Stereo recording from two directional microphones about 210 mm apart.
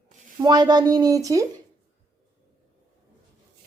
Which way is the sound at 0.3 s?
20° right (ahead or behind).